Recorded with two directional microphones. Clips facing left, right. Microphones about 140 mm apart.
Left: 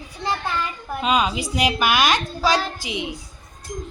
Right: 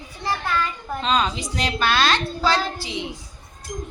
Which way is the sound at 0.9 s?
10° left (ahead or behind).